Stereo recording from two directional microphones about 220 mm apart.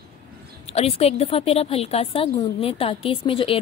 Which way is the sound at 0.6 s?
25° left (ahead or behind).